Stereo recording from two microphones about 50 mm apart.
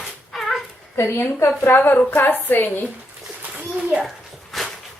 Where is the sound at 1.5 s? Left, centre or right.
Left.